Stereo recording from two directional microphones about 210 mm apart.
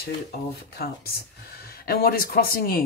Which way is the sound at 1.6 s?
45° left (ahead or behind).